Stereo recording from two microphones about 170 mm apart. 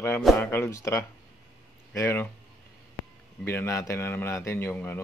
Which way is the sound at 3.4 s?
15° left (ahead or behind).